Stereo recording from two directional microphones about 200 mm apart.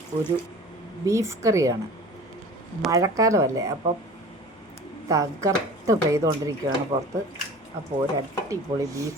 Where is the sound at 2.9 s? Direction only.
15° right (ahead or behind).